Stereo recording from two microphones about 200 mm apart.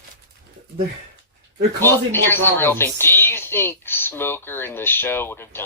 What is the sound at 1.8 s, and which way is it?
A man's voice, 10° left (ahead or behind).